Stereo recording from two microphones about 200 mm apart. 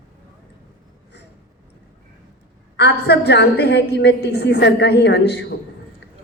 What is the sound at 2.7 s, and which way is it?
A woman's voice, 55° left (ahead or behind).